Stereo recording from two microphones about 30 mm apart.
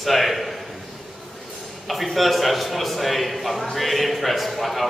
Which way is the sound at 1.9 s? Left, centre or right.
Centre.